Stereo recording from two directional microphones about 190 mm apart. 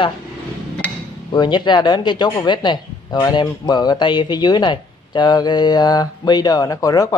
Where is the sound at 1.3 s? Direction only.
20° left (ahead or behind).